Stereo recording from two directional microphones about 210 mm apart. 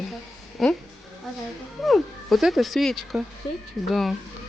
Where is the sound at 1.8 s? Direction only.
Centre (ahead or behind).